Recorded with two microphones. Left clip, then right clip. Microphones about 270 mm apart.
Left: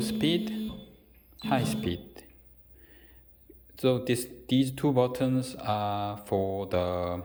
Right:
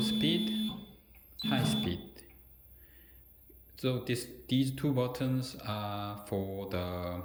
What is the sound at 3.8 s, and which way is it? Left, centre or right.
Speech, centre.